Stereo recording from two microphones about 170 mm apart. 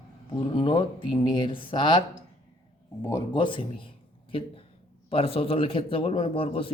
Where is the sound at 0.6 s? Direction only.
30° left (ahead or behind).